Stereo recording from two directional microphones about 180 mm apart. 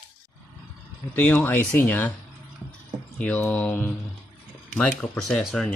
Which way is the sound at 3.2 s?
10° left (ahead or behind).